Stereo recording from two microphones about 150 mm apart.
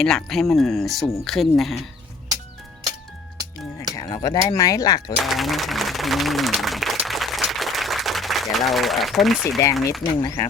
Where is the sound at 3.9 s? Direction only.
25° left (ahead or behind).